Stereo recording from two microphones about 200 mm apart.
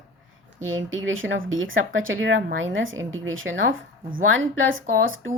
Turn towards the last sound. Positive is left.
turn(degrees=-75)  # may be behind; listen again after turning